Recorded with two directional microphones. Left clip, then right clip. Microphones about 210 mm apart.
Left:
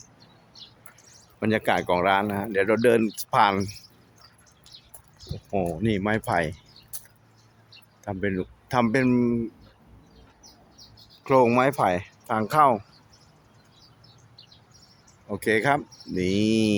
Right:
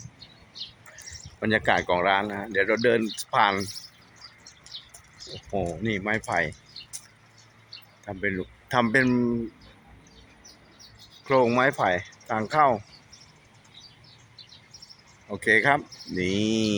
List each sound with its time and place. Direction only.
1.4 s speech: 15° left (ahead or behind)
4.7 s bird: 20° right (ahead or behind)
5.5 s speech: 10° left (ahead or behind)
6.0 s speech: 25° left (ahead or behind)
8.0 s speech: 20° left (ahead or behind)
11.2 s speech: 15° left (ahead or behind)
15.3 s speech: 20° left (ahead or behind)